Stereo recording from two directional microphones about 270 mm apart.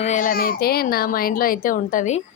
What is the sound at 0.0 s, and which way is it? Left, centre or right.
A child's voice, left.